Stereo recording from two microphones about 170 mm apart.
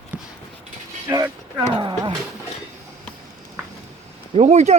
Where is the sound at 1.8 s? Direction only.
30° right (ahead or behind).